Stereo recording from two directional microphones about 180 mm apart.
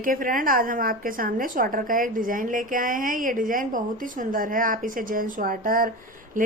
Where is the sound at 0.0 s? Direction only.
50° right (ahead or behind).